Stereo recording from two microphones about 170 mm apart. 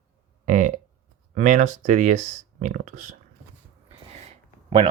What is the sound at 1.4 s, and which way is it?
Speech, 45° right (ahead or behind).